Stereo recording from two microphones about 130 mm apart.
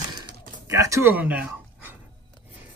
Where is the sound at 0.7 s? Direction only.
25° right (ahead or behind).